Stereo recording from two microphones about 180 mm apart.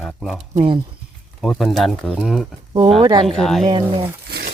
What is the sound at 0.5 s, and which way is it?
Speech, 30° right (ahead or behind).